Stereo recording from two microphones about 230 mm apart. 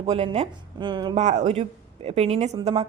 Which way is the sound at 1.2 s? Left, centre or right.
Right.